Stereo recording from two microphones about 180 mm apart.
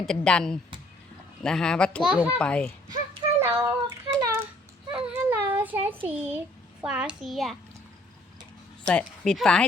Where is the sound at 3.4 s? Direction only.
20° right (ahead or behind).